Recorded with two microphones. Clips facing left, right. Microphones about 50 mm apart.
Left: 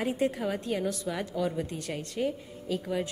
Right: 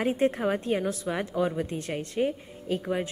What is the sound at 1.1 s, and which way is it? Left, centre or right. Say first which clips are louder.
Speech: right 3 dB; right.